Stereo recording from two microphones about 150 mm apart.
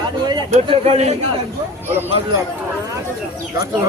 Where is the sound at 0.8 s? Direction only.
45° right (ahead or behind).